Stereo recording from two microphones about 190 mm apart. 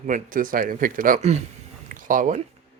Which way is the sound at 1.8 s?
45° right (ahead or behind).